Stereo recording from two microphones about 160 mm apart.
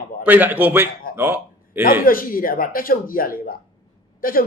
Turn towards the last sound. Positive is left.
turn(degrees=65)  # may be behind; listen again after turning